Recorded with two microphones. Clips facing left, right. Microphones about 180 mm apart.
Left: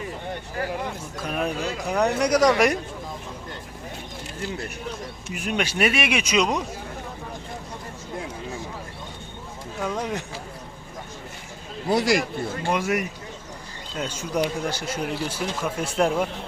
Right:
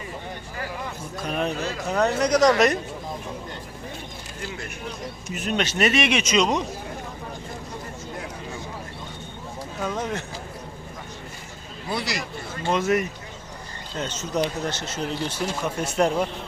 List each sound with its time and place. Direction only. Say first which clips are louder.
1.2 s speech: even; 5° left (ahead or behind)
5.3 s speech: right 1 dB; 10° left (ahead or behind)
11.9 s speech: left 8 dB; 45° left (ahead or behind)
12.6 s speech: right 3 dB; 15° left (ahead or behind)